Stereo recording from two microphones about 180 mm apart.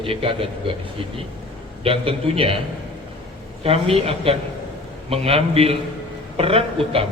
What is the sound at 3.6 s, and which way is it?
A man's voice, 35° right (ahead or behind).